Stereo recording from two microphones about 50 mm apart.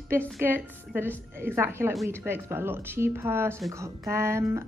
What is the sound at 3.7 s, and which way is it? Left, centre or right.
Speech, right.